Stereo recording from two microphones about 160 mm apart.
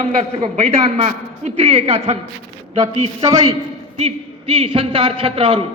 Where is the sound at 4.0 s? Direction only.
40° right (ahead or behind).